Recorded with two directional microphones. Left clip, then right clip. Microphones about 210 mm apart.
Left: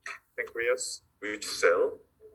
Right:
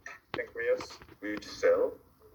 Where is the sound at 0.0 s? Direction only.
55° left (ahead or behind).